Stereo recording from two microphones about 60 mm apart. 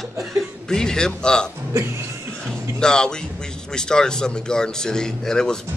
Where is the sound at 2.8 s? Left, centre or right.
Centre.